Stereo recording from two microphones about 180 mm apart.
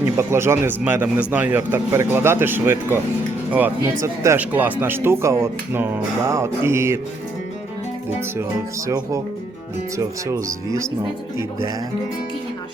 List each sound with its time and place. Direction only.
0.0 s speech: 15° right (ahead or behind)
4.0 s speech: 15° right (ahead or behind)
10.0 s speech: 20° right (ahead or behind)